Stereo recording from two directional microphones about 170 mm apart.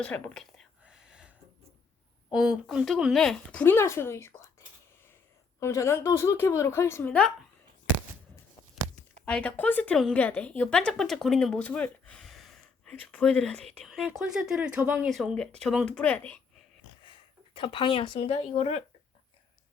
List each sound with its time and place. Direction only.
0.0 s a sound: 5° left (ahead or behind)
2.3 s speech: 5° right (ahead or behind); by 4.5 s 15° left (ahead or behind)
5.5 s speech: 15° left (ahead or behind)
9.2 s a woman's voice: 5° left (ahead or behind); by 15.1 s 10° right (ahead or behind)
15.1 s a woman's voice: centre (ahead or behind)
17.0 s speech: 30° left (ahead or behind)